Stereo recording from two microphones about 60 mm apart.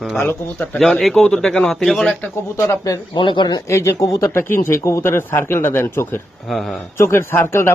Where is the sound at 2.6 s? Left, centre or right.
Left.